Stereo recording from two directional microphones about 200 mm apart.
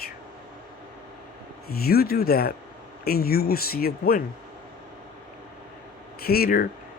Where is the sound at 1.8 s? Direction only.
50° left (ahead or behind).